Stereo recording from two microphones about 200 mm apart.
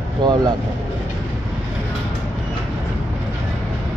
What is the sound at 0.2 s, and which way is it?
Speech, 25° right (ahead or behind).